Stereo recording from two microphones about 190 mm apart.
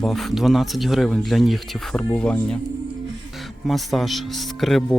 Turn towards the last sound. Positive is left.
turn(degrees=0)  # may be behind; listen again after turning